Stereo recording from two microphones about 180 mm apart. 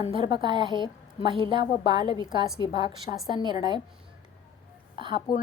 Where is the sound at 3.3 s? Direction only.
25° right (ahead or behind).